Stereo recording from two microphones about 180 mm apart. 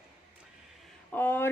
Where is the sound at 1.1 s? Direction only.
10° left (ahead or behind).